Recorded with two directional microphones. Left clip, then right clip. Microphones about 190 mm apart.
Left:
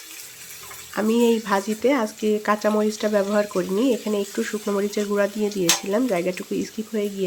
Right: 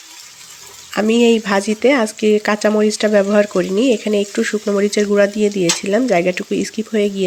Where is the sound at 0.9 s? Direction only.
20° right (ahead or behind).